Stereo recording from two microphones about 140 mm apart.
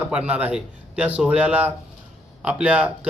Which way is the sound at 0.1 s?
10° right (ahead or behind).